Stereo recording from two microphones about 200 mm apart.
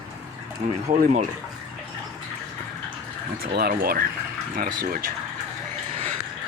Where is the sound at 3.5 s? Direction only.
50° right (ahead or behind).